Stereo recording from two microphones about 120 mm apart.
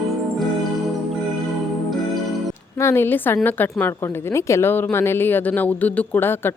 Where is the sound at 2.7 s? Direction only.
20° left (ahead or behind).